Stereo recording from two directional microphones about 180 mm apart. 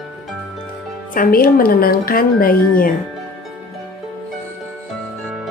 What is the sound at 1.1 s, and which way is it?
A woman's voice, 55° left (ahead or behind).